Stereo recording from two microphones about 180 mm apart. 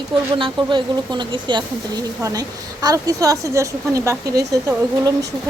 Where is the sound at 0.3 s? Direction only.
25° right (ahead or behind).